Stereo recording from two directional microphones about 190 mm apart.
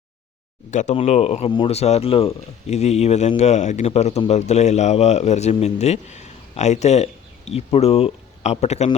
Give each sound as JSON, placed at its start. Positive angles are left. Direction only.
{"t": 0.7, "sound": "speech", "side_deg": 40}